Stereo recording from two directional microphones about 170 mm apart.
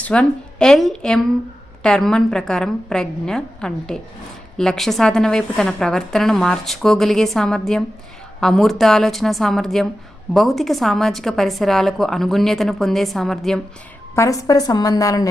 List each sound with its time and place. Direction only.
0.0 s a woman's voice: 5° left (ahead or behind)
14.2 s a woman's voice: 20° left (ahead or behind)